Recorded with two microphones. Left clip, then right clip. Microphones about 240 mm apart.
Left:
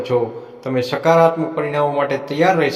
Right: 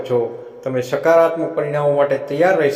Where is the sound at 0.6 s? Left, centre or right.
Left.